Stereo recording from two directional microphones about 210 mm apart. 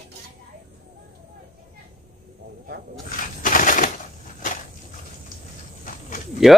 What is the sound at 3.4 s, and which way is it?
Crushing, 40° left (ahead or behind).